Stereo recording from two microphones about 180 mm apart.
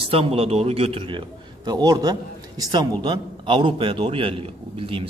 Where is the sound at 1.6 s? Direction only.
20° right (ahead or behind).